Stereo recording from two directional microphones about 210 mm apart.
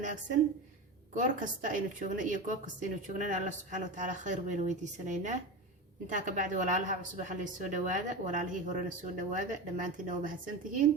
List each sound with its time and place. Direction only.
1.1 s speech: 40° right (ahead or behind)